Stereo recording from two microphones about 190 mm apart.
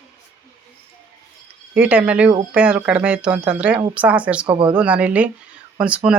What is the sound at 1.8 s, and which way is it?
Speech, 5° right (ahead or behind).